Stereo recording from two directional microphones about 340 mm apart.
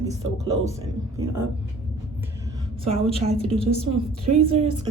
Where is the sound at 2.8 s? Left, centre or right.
Centre.